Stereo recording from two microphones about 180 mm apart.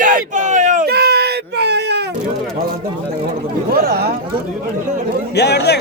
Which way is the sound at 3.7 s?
60° right (ahead or behind).